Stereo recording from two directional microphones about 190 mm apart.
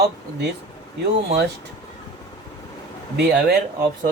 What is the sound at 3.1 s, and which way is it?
Speech, 60° right (ahead or behind).